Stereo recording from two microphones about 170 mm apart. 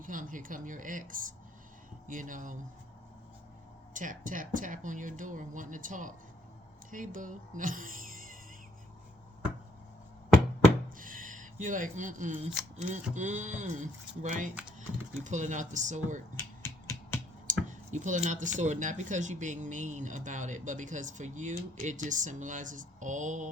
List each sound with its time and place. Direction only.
0.0 s speech: 50° right (ahead or behind)
3.9 s speech: 50° right (ahead or behind)
10.8 s a sound: 55° right (ahead or behind)
13.1 s speech: 45° right (ahead or behind)
17.4 s clicking: 45° right (ahead or behind)
18.6 s speech: 45° right (ahead or behind)